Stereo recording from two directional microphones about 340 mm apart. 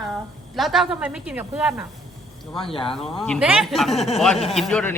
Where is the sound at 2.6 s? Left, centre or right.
Centre.